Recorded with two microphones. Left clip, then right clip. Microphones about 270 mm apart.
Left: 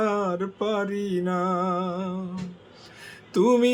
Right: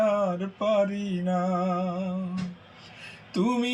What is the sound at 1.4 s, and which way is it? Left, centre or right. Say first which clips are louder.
Music: even; centre.